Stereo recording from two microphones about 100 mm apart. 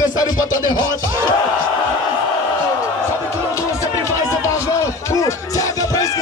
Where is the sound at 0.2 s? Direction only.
40° left (ahead or behind).